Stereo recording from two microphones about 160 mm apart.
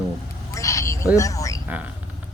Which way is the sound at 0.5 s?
20° left (ahead or behind).